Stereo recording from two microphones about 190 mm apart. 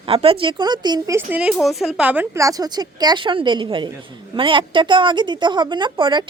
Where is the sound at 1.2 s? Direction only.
5° right (ahead or behind).